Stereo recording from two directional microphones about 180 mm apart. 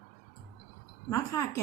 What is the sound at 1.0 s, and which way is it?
Speech, 20° left (ahead or behind).